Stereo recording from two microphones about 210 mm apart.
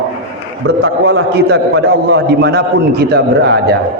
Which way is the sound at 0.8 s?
70° right (ahead or behind).